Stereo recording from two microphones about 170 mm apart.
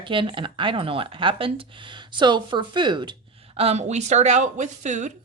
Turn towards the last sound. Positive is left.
turn(degrees=-45)  # may be behind; listen again after turning